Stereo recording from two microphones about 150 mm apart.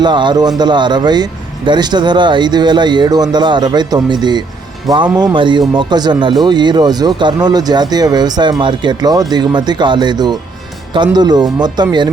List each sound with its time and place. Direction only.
0.0 s speech: 30° right (ahead or behind)